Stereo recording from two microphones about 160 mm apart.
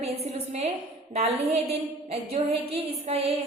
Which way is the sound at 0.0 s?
40° right (ahead or behind).